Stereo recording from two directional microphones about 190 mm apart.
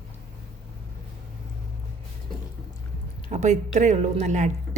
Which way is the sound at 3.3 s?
40° right (ahead or behind).